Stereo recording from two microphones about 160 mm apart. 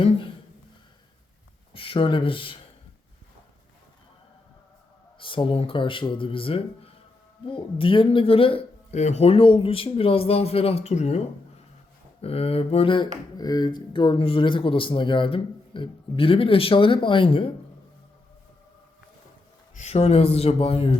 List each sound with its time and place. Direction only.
0.0 s speech: 35° left (ahead or behind)
1.7 s speech: 35° left (ahead or behind)
5.2 s speech: 30° left (ahead or behind)
12.2 s speech: 40° left (ahead or behind)
19.7 s speech: 45° left (ahead or behind)